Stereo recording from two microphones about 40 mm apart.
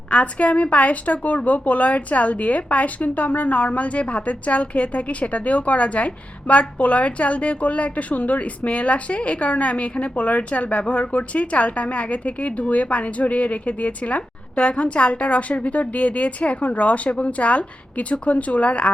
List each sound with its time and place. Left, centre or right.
0.1 s a woman's voice: left